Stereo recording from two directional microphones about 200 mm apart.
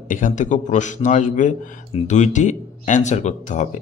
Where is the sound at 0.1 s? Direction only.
40° left (ahead or behind).